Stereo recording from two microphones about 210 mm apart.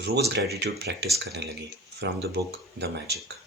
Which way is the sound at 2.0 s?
60° right (ahead or behind).